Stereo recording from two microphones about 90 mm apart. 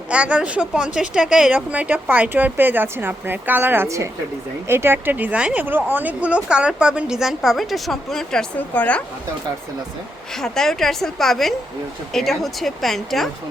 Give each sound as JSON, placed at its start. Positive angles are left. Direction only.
{"t": 0.1, "sound": "a woman's voice", "side_deg": -10}
{"t": 8.5, "sound": "speech", "side_deg": 20}
{"t": 10.3, "sound": "a woman's voice", "side_deg": 5}